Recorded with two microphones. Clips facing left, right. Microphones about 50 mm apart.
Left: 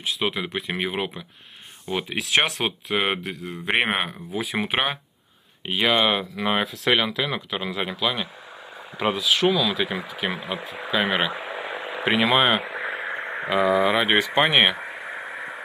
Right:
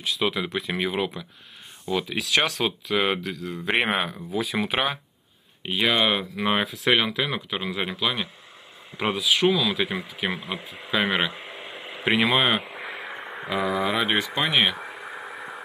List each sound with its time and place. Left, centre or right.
0.2 s speech: centre
1.9 s speech: left
5.7 s speech: centre
12.6 s radio: left
13.5 s speech: centre
13.7 s speech: centre
14.0 s speech: left